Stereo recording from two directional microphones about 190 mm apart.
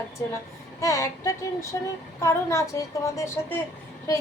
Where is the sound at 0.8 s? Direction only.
15° left (ahead or behind).